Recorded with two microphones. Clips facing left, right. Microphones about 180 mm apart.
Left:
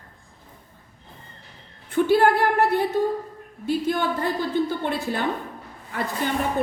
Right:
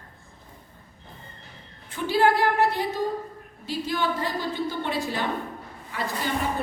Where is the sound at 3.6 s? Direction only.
55° left (ahead or behind).